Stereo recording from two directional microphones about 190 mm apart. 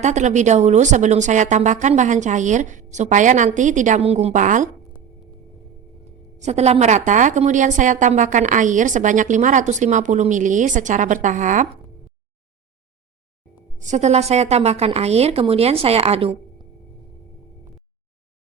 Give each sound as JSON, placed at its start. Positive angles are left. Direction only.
{"t": 0.0, "sound": "a woman's voice", "side_deg": -40}
{"t": 6.4, "sound": "a woman's voice", "side_deg": -35}
{"t": 13.7, "sound": "a woman's voice", "side_deg": -40}